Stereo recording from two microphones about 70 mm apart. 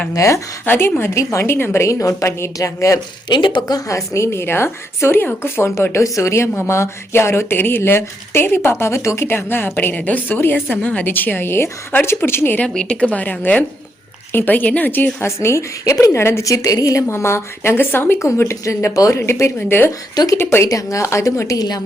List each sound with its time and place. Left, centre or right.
0.1 s a woman's voice: left
0.6 s a woman's voice: left
1.1 s a woman's voice: left
3.2 s a woman's voice: left
12.6 s a woman's voice: centre; by 15.6 s left
15.8 s a woman's voice: left
17.1 s a woman's voice: left
18.3 s a woman's voice: left
20.7 s a woman's voice: left